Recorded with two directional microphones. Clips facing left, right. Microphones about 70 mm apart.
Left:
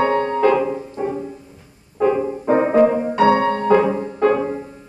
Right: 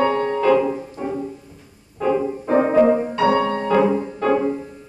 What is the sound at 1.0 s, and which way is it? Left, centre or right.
Music, left.